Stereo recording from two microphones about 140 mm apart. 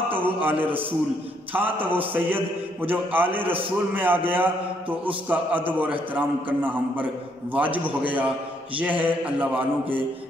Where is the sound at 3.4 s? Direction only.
40° right (ahead or behind).